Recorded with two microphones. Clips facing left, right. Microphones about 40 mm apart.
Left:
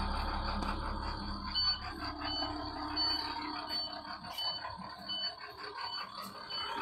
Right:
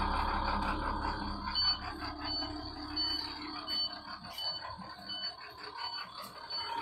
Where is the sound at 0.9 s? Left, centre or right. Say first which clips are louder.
Right 4 dB; right.